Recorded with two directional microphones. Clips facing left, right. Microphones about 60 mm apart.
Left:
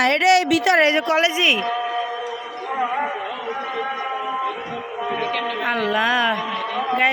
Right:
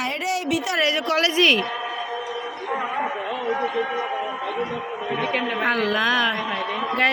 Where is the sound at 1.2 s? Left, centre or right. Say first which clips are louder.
Even; centre.